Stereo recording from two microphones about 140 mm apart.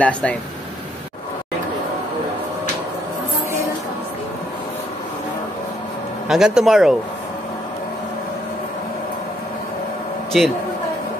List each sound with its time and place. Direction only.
0.0 s speech: 10° left (ahead or behind)
6.2 s speech: 5° right (ahead or behind)
10.3 s speech: centre (ahead or behind)